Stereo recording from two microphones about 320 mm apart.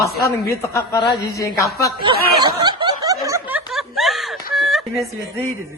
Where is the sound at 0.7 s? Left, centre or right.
Centre.